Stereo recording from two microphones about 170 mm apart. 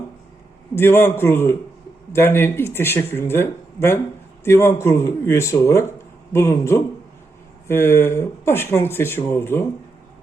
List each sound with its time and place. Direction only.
0.8 s speech: 15° left (ahead or behind)